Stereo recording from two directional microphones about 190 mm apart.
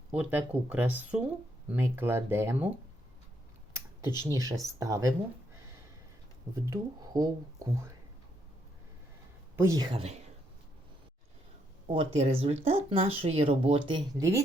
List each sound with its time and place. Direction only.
0.2 s speech: 10° right (ahead or behind)
3.7 s computer keyboard: 15° right (ahead or behind)
4.2 s speech: 15° right (ahead or behind)
6.7 s speech: 20° right (ahead or behind)
9.6 s speech: 15° right (ahead or behind)
11.9 s speech: 30° right (ahead or behind)